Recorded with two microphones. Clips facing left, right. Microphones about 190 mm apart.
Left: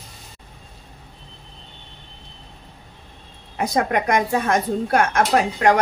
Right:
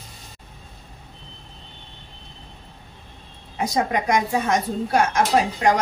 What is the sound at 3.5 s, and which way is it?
Speech, 60° left (ahead or behind).